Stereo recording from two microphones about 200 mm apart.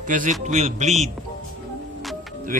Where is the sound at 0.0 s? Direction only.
40° right (ahead or behind).